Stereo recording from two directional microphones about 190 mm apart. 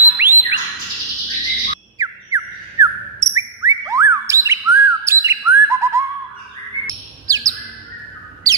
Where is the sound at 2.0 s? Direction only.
15° right (ahead or behind).